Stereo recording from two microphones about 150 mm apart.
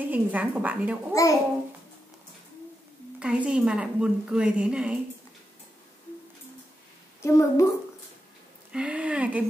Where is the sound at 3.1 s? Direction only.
5° right (ahead or behind).